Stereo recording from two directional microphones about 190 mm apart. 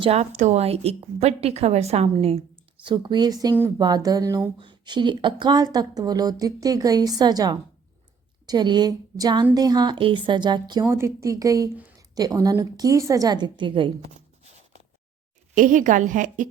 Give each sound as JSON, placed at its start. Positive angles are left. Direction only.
{"t": 0.0, "sound": "a woman's voice", "side_deg": -35}
{"t": 15.5, "sound": "a woman's voice", "side_deg": -45}